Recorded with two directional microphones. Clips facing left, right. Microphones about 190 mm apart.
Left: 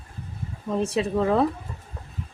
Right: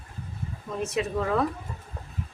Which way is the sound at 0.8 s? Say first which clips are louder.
Left 4 dB; 30° left (ahead or behind).